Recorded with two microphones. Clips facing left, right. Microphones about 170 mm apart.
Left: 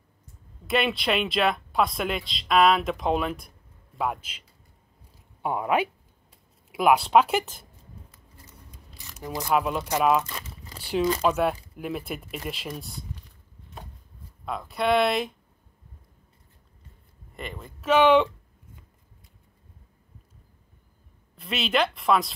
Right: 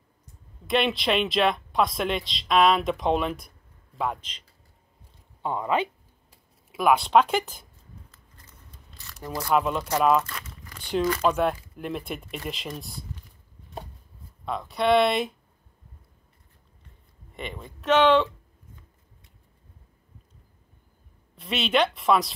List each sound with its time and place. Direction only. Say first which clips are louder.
0.7 s speech: right 1 dB; centre (ahead or behind)
5.4 s speech: left 1 dB; 10° left (ahead or behind)
8.7 s a sound: right 1 dB; 15° left (ahead or behind)
9.5 s speech: right 1 dB; 5° left (ahead or behind)
10.2 s crumpling: left 1 dB; 25° left (ahead or behind)
10.8 s speech: even; 5° left (ahead or behind)
14.4 s speech: right 1 dB; centre (ahead or behind)
17.4 s speech: right 1 dB; centre (ahead or behind)
21.4 s speech: right 2 dB; centre (ahead or behind)